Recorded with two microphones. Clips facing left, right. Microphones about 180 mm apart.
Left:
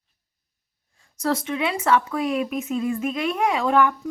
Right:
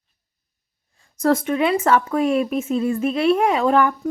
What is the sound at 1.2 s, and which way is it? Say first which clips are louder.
Speech: right 6 dB; 50° right (ahead or behind).